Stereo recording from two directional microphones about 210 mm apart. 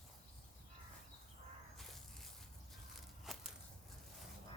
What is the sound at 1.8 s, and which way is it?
Snake, centre (ahead or behind).